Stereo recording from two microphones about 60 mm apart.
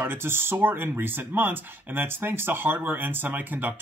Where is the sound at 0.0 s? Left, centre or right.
Right.